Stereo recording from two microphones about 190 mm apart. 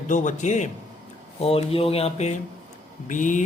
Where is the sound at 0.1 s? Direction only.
40° left (ahead or behind).